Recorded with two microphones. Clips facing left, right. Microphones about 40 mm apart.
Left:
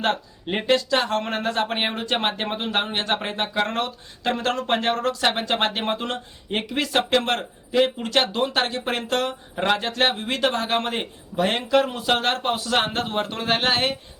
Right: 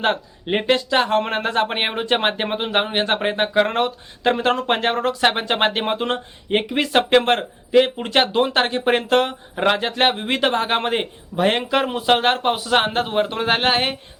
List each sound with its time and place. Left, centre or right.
0.0 s speech: right